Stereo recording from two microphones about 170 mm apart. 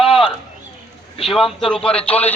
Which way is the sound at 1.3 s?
Centre (ahead or behind).